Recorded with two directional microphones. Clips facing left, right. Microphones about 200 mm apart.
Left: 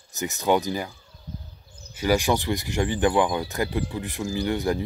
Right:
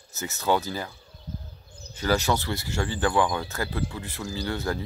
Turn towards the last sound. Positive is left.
turn(degrees=15)  # may be behind; listen again after turning